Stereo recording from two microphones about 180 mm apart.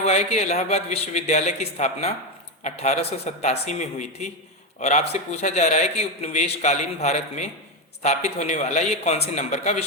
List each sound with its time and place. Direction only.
0.0 s a man's voice: 35° left (ahead or behind)